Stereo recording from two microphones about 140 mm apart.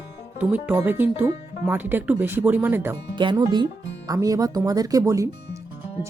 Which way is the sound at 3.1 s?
35° right (ahead or behind).